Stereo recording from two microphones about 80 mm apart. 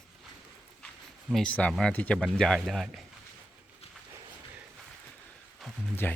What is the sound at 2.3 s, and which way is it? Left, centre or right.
Speech, centre.